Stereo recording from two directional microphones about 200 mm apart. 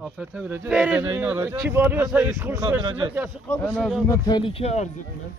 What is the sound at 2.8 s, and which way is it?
Speech, 25° right (ahead or behind).